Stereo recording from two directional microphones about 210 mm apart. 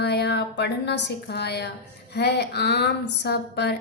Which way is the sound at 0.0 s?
50° left (ahead or behind).